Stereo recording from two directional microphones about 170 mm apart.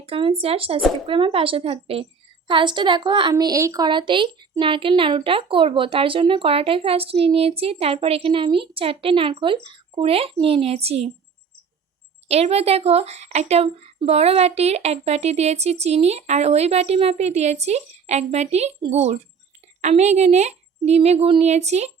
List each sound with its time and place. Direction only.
0.0 s a woman's voice: 35° right (ahead or behind)
12.3 s a woman's voice: 35° right (ahead or behind)